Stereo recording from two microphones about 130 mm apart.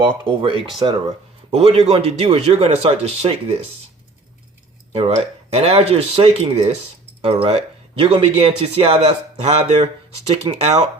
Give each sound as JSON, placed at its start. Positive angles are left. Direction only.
{"t": 0.0, "sound": "speech", "side_deg": -40}
{"t": 4.9, "sound": "speech", "side_deg": -55}